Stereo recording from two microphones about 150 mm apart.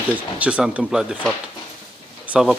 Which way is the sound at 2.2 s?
5° right (ahead or behind).